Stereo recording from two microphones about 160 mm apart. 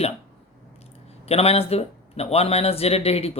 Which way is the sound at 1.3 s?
40° left (ahead or behind).